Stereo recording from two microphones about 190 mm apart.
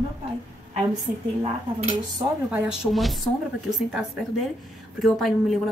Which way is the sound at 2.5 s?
5° right (ahead or behind).